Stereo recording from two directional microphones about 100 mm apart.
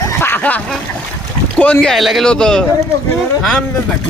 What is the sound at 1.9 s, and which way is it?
Speech, centre (ahead or behind).